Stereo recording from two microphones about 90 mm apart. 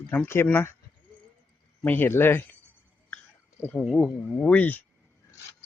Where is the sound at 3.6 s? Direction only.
20° left (ahead or behind).